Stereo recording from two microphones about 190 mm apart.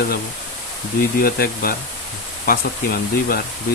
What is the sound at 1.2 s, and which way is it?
Speech, 50° left (ahead or behind).